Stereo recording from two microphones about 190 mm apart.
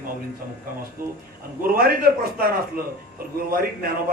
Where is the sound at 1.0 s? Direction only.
50° right (ahead or behind).